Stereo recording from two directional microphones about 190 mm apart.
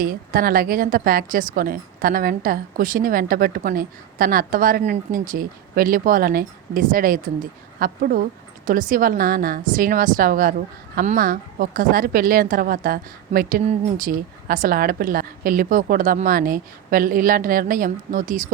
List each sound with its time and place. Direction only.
0.0 s speech: 50° right (ahead or behind)